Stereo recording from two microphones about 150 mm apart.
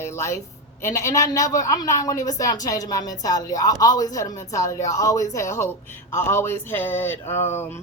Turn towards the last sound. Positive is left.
turn(degrees=15)  # may be behind; listen again after turning